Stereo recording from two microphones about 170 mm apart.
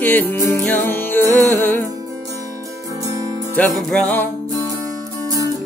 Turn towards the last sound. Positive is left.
turn(degrees=10)  # may be behind; listen again after turning